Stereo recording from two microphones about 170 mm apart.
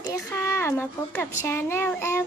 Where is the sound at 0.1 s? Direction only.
15° left (ahead or behind).